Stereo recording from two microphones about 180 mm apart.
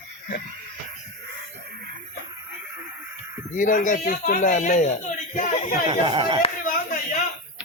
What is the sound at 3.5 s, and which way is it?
A man's voice, 45° left (ahead or behind).